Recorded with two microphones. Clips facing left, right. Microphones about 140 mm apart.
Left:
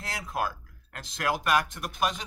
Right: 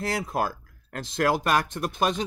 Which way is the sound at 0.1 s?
35° right (ahead or behind).